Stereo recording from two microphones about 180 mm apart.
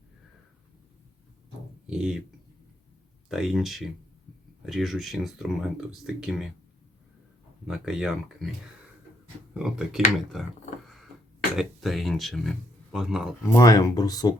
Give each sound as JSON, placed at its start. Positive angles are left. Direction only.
{"t": 1.9, "sound": "speech", "side_deg": -5}
{"t": 3.2, "sound": "speech", "side_deg": 0}
{"t": 7.7, "sound": "speech", "side_deg": -5}
{"t": 9.6, "sound": "speech", "side_deg": -5}
{"t": 11.5, "sound": "speech", "side_deg": 0}
{"t": 13.5, "sound": "speech", "side_deg": 20}